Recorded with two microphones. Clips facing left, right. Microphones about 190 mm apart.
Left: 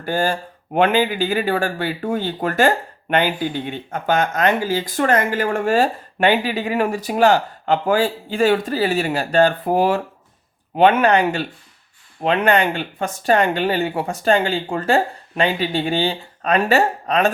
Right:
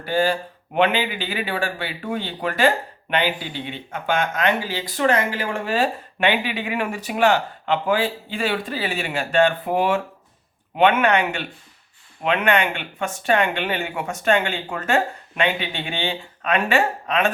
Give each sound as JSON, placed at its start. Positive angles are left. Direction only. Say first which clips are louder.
{"t": 0.0, "sound": "speech", "louder": "even", "side_deg": 45}